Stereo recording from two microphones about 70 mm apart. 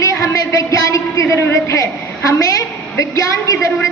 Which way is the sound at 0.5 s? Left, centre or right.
Left.